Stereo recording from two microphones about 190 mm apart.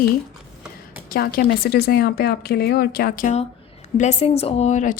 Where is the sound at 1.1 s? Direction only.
50° left (ahead or behind).